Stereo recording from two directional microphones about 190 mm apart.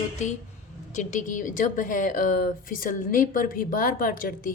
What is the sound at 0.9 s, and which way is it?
A woman's voice, 40° left (ahead or behind).